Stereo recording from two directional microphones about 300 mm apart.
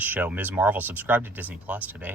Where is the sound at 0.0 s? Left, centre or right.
Centre.